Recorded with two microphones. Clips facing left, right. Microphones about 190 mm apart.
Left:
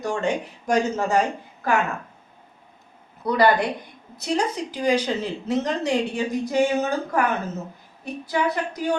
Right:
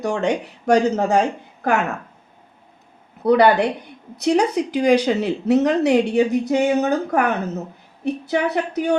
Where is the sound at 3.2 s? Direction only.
65° right (ahead or behind).